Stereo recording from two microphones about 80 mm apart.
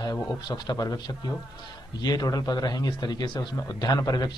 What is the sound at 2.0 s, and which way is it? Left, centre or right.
A man's voice, left.